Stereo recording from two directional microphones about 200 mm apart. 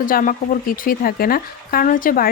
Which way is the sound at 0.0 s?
45° left (ahead or behind).